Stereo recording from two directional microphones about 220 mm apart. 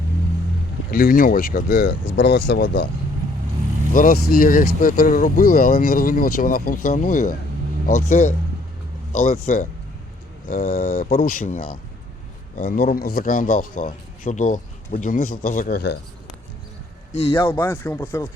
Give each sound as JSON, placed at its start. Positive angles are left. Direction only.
{"t": 0.9, "sound": "a man's voice", "side_deg": 40}
{"t": 3.9, "sound": "a man's voice", "side_deg": 40}
{"t": 7.9, "sound": "speech", "side_deg": 85}
{"t": 9.2, "sound": "a man's voice", "side_deg": 40}
{"t": 17.1, "sound": "speech", "side_deg": 25}
{"t": 17.5, "sound": "speech", "side_deg": 10}